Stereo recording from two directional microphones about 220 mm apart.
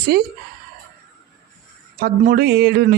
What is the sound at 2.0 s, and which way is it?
Speech, 40° right (ahead or behind).